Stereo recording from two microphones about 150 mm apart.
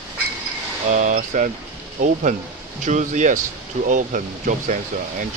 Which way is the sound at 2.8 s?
55° right (ahead or behind).